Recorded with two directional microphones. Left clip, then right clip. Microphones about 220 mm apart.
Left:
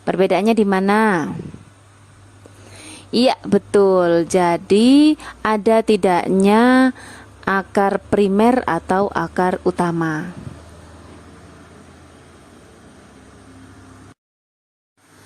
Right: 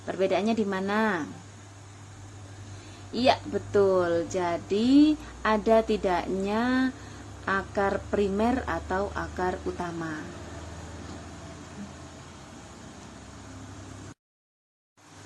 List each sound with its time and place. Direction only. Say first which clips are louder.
0.0 s a woman's voice: left 10 dB; 50° left (ahead or behind)
3.1 s a woman's voice: left 8 dB; 50° left (ahead or behind)